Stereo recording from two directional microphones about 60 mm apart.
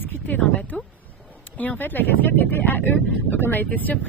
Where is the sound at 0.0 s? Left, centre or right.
Left.